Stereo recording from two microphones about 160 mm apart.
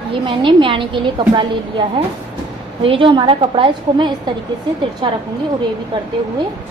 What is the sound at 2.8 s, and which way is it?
A woman's voice, 30° right (ahead or behind).